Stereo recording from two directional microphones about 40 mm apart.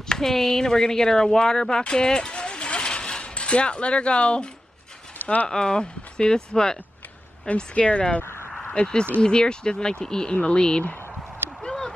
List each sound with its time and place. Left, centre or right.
0.2 s speech: centre; by 4.5 s left
5.2 s speech: left
5.5 s speech: centre
7.4 s speech: left
8.2 s a sound: left
9.2 s speech: left
11.6 s a sound: centre